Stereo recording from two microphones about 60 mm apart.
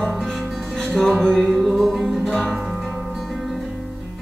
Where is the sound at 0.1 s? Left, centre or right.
Centre.